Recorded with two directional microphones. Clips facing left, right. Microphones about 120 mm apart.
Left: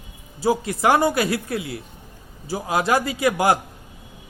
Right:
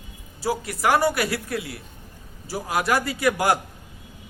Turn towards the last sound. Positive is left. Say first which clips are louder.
# left 2 dB
turn(degrees=20)  # may be behind; listen again after turning